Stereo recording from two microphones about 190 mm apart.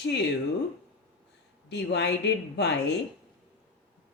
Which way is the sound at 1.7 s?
65° left (ahead or behind).